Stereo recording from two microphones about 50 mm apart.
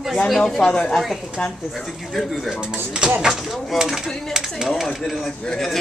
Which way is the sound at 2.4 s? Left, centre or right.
Centre.